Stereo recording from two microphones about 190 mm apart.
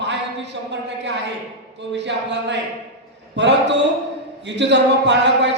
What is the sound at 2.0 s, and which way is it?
Speech, 70° right (ahead or behind).